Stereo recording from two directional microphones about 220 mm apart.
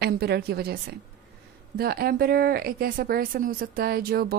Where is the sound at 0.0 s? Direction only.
45° right (ahead or behind).